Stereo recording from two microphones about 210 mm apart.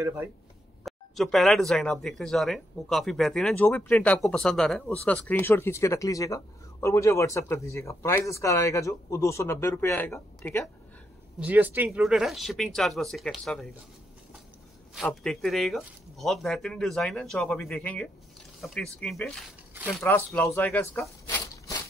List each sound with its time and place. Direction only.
0.8 s speech: centre (ahead or behind)
11.3 s speech: 10° right (ahead or behind)
15.0 s speech: centre (ahead or behind)
20.5 s a sound: 10° left (ahead or behind)